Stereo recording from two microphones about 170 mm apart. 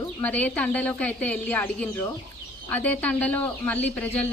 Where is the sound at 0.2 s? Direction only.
10° left (ahead or behind).